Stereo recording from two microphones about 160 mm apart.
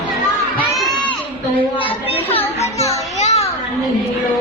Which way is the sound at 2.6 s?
40° left (ahead or behind).